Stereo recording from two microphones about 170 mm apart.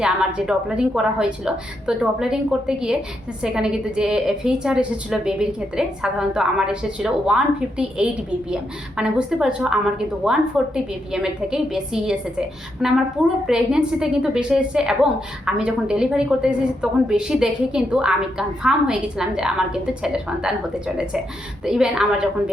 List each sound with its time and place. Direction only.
0.0 s a woman's voice: 5° right (ahead or behind)